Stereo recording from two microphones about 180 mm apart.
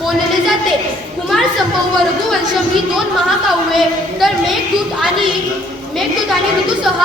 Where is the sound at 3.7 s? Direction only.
Centre (ahead or behind).